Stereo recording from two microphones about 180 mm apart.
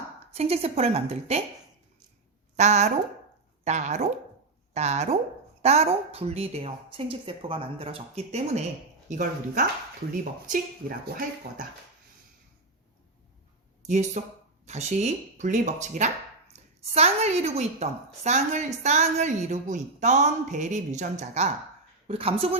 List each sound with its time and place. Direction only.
0.3 s a woman's voice: 35° right (ahead or behind)
2.6 s a woman's voice: 40° right (ahead or behind)
10.5 s speech: 55° right (ahead or behind)
13.8 s a woman's voice: 40° right (ahead or behind)